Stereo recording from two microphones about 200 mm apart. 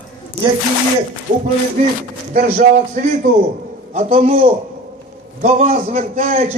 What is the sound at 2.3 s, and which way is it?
A man's voice, 40° right (ahead or behind).